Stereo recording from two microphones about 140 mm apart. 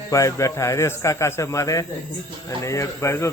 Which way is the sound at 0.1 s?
20° left (ahead or behind).